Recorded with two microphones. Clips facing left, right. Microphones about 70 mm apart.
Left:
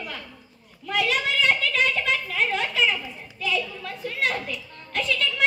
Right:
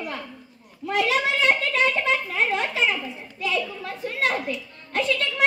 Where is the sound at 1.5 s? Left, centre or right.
Right.